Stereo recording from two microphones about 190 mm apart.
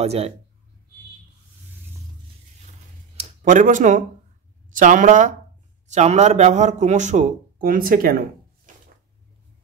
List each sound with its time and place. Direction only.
0.0 s speech: 35° right (ahead or behind)
3.2 s speech: 45° right (ahead or behind)